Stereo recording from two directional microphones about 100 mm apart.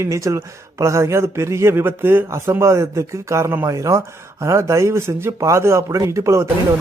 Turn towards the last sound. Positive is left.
turn(degrees=-30)  # may be behind; listen again after turning